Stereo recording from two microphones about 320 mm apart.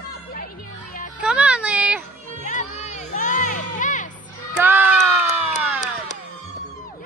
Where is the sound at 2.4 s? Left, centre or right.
Left.